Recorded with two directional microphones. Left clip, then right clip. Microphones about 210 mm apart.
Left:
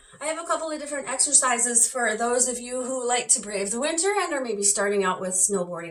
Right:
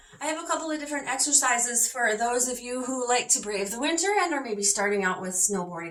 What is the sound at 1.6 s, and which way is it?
A woman's voice, 5° right (ahead or behind).